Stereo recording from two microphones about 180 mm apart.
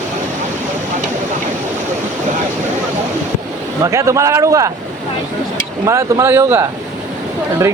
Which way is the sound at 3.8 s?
15° right (ahead or behind).